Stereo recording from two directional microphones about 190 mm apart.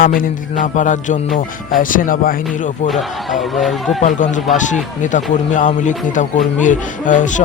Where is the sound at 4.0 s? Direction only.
40° left (ahead or behind).